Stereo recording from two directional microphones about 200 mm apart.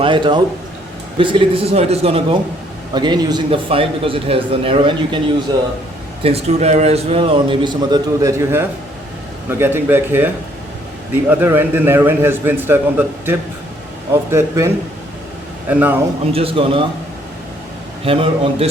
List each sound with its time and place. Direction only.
0.0 s a man's voice: 25° right (ahead or behind)
6.2 s a man's voice: 30° right (ahead or behind); by 14.7 s 15° right (ahead or behind)
15.7 s a man's voice: 10° right (ahead or behind)
16.3 s a man's voice: 30° right (ahead or behind)
18.0 s a man's voice: 30° right (ahead or behind)